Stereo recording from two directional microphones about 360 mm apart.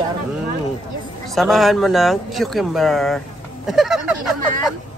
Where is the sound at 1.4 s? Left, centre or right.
Centre.